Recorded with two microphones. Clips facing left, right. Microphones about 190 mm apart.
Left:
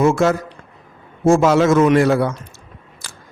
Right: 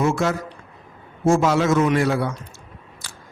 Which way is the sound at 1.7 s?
90° left.